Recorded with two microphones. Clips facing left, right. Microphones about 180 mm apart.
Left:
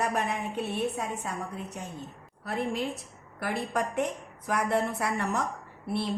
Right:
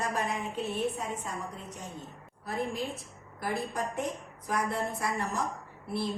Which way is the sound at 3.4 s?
70° left (ahead or behind).